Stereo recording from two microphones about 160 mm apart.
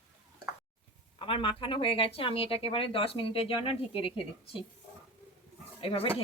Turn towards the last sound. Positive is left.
turn(degrees=35)  # may be behind; listen again after turning